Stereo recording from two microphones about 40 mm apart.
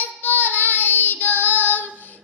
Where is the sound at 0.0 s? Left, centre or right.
Left.